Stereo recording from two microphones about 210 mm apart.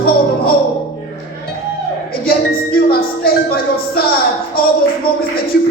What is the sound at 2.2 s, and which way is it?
Music, 45° left (ahead or behind).